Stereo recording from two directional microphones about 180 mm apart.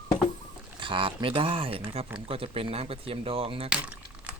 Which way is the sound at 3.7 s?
5° right (ahead or behind).